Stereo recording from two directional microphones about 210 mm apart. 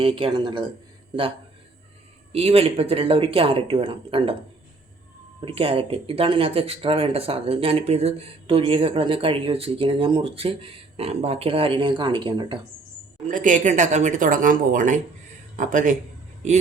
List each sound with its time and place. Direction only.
0.0 s speech: 25° right (ahead or behind)
2.3 s speech: 30° right (ahead or behind)
5.5 s speech: 25° right (ahead or behind)
13.2 s speech: 35° right (ahead or behind)